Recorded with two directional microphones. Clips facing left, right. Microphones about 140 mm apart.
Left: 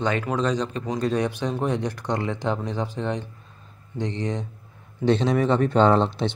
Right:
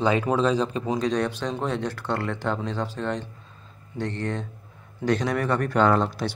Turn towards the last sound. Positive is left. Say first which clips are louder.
# left 2 dB
turn(degrees=25)  # may be behind; listen again after turning